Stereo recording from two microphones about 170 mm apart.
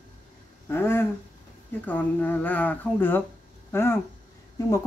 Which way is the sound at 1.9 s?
10° left (ahead or behind).